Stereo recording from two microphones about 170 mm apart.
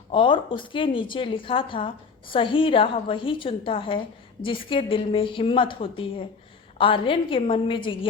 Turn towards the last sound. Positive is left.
turn(degrees=30)  # may be behind; listen again after turning